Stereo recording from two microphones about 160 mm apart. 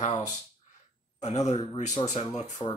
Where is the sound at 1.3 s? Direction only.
25° left (ahead or behind).